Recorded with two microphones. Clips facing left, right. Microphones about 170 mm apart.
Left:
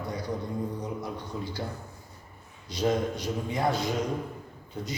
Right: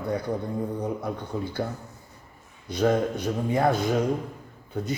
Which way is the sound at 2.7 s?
55° right (ahead or behind).